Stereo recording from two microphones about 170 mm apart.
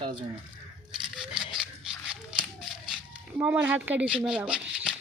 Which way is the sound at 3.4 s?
10° right (ahead or behind).